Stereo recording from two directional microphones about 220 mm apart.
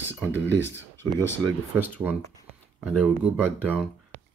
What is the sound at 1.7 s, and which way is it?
Speech, 10° right (ahead or behind).